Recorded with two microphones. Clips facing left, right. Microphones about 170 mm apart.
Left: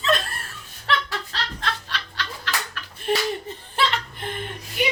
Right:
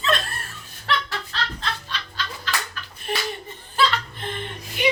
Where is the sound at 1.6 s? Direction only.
70° left (ahead or behind).